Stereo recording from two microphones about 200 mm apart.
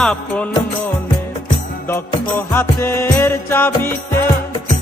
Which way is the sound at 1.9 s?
10° left (ahead or behind).